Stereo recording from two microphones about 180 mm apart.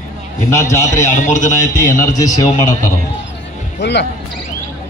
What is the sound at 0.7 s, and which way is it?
Speech, 15° left (ahead or behind).